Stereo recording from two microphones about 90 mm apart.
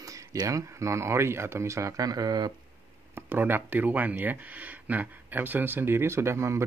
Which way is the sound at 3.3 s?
25° right (ahead or behind).